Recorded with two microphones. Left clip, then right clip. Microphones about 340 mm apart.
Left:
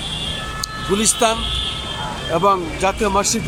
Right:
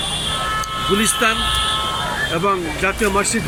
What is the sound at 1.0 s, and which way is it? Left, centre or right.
Speech, centre.